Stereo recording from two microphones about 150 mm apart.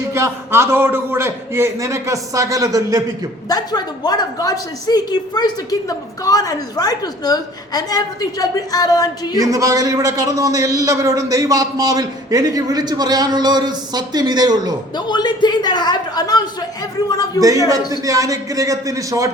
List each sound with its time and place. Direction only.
0.1 s a man's voice: 20° right (ahead or behind)
3.5 s a woman's voice: 25° left (ahead or behind)
9.4 s a man's voice: 20° right (ahead or behind)
14.9 s a woman's voice: 30° left (ahead or behind)
18.0 s a man's voice: 20° right (ahead or behind)